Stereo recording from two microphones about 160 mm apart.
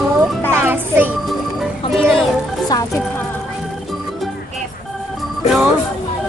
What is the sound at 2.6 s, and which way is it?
Music, 20° left (ahead or behind).